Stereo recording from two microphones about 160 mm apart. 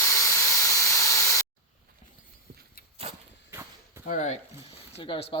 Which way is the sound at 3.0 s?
40° right (ahead or behind).